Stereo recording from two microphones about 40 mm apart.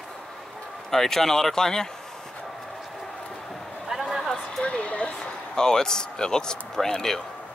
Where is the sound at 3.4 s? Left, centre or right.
Centre.